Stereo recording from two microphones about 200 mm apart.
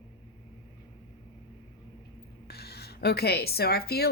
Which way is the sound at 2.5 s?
50° left (ahead or behind).